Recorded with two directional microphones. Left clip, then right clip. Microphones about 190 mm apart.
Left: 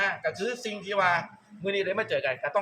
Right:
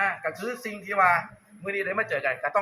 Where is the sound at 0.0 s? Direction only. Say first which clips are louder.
Right 1 dB; 50° left (ahead or behind).